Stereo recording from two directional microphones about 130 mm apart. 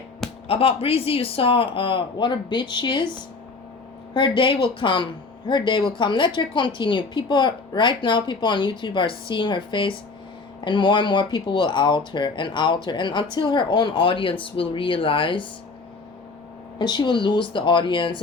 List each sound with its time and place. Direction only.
0.4 s speech: 45° left (ahead or behind)
4.1 s a woman's voice: 40° left (ahead or behind)
16.7 s a woman's voice: 35° left (ahead or behind)